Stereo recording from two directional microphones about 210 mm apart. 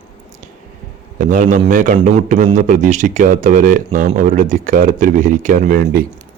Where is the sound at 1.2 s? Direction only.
40° right (ahead or behind).